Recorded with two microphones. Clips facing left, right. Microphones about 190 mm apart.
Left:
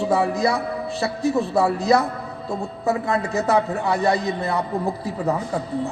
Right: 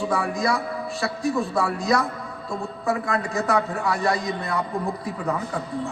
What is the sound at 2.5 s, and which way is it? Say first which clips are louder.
A man's voice: left 2 dB; 20° left (ahead or behind).